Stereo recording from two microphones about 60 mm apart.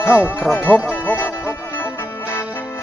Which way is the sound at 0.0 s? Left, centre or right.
Left.